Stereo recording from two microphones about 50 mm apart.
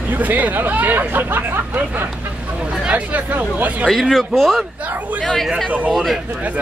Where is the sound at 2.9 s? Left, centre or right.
Right.